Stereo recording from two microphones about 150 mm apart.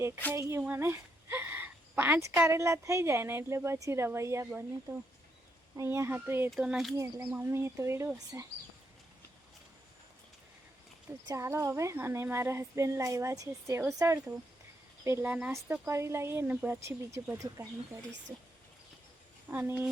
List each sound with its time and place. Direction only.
0.3 s a woman's voice: 20° right (ahead or behind)
6.5 s speech: centre (ahead or behind)
6.9 s speech: 20° right (ahead or behind)
11.1 s a woman's voice: 20° right (ahead or behind)
19.5 s a woman's voice: 15° right (ahead or behind)